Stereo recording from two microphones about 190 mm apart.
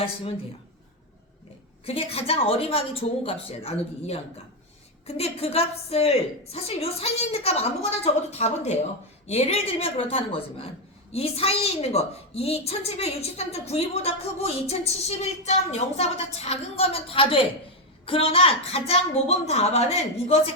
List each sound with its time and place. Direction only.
0.0 s speech: 30° left (ahead or behind)
1.8 s a woman's voice: 30° left (ahead or behind)